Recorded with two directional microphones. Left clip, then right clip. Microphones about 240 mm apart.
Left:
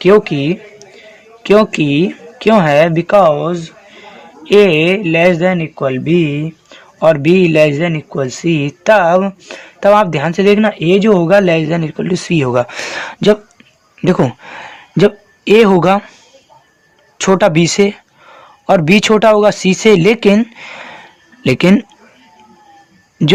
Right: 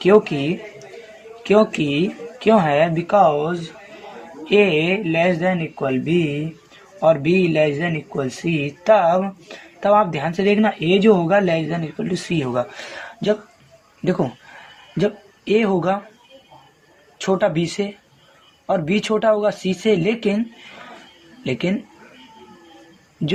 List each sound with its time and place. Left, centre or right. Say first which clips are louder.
0.0 s a man's voice: left 5 dB; left
17.2 s a man's voice: left 9 dB; left